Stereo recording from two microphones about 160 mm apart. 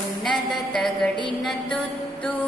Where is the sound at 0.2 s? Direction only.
Centre (ahead or behind).